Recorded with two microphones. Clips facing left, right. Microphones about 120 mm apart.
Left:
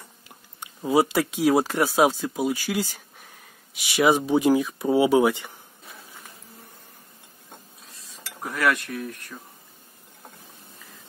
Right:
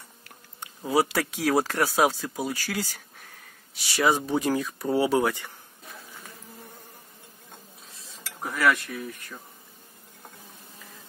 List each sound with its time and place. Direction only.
0.8 s speech: 20° left (ahead or behind)
8.3 s cutlery: centre (ahead or behind)